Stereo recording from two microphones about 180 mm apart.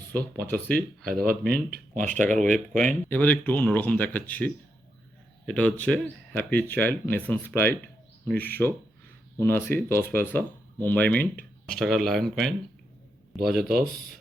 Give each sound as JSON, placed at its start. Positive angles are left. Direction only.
{"t": 0.1, "sound": "speech", "side_deg": 10}
{"t": 1.3, "sound": "speech", "side_deg": -60}
{"t": 2.4, "sound": "a man's voice", "side_deg": 5}
{"t": 13.6, "sound": "speech", "side_deg": -55}